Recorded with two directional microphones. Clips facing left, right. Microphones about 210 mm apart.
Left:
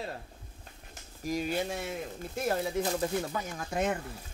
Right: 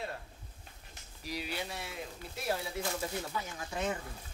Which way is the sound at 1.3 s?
45° left (ahead or behind).